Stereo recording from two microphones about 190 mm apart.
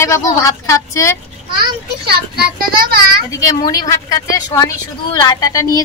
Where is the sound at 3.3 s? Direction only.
15° left (ahead or behind).